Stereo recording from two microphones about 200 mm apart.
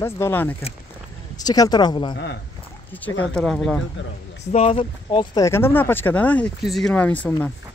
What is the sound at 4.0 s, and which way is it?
Speech, 65° left (ahead or behind).